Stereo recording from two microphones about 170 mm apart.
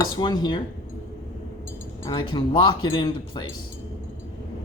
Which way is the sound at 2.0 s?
30° left (ahead or behind).